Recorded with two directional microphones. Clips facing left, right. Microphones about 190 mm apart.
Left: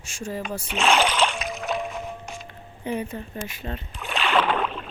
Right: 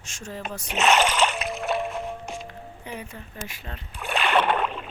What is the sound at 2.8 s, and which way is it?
Speech, 25° left (ahead or behind).